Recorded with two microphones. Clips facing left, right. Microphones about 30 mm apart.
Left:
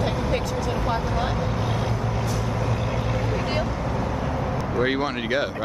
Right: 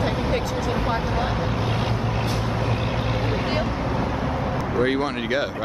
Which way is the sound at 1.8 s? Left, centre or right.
Right.